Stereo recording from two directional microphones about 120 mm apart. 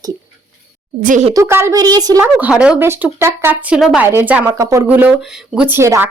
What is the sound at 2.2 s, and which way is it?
Speech, 10° right (ahead or behind).